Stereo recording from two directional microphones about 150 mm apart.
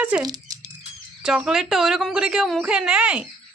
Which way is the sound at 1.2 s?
5° right (ahead or behind).